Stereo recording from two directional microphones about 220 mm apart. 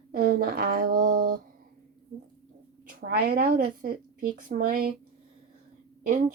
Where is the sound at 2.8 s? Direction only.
40° right (ahead or behind).